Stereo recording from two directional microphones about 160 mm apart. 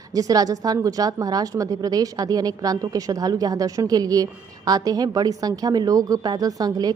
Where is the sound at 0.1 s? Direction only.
20° right (ahead or behind).